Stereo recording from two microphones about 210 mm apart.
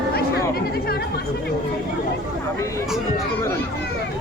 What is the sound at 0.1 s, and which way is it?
Chatter, 50° left (ahead or behind).